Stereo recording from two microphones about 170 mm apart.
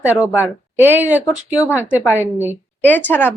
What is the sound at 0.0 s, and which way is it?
Speech, 10° right (ahead or behind).